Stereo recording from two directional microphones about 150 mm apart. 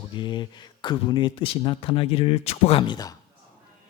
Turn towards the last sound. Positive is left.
turn(degrees=30)  # may be behind; listen again after turning